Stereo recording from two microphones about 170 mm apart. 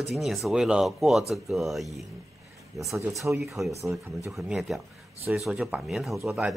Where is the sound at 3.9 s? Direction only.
15° right (ahead or behind).